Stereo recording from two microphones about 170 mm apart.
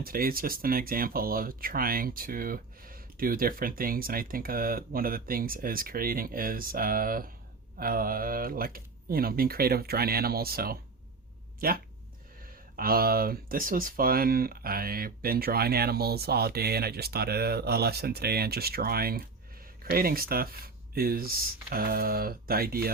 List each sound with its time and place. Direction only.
0.0 s speech: 60° right (ahead or behind)